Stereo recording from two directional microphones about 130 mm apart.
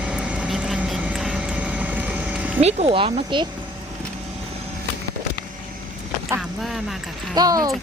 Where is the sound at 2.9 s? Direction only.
40° right (ahead or behind).